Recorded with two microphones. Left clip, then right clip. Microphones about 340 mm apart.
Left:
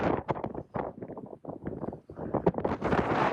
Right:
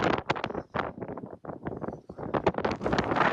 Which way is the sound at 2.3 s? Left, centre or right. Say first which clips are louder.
Right 1 dB; left.